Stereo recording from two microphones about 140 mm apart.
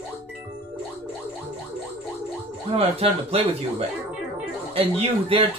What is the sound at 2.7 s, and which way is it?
Speech, 45° right (ahead or behind).